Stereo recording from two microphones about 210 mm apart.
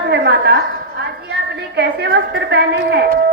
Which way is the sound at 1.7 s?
55° right (ahead or behind).